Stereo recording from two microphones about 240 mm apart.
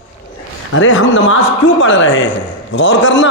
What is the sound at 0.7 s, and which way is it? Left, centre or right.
A man's voice, left.